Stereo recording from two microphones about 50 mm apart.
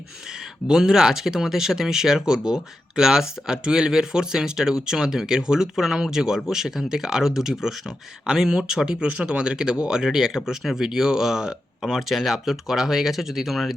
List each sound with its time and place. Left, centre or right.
0.7 s speech: centre